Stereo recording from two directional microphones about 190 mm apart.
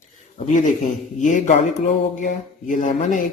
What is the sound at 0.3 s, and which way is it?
Speech, 40° left (ahead or behind).